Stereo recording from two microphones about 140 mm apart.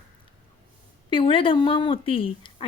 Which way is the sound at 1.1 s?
40° left (ahead or behind).